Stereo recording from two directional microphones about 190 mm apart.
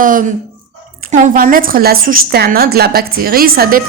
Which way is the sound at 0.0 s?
45° right (ahead or behind).